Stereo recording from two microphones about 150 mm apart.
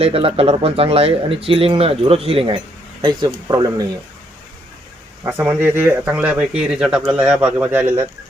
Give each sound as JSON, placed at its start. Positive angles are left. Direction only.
{"t": 0.0, "sound": "speech", "side_deg": -40}
{"t": 5.2, "sound": "speech", "side_deg": -15}